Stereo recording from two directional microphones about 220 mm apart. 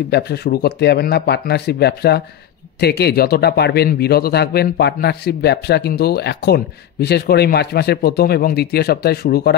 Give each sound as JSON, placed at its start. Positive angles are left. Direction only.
{"t": 0.1, "sound": "speech", "side_deg": 45}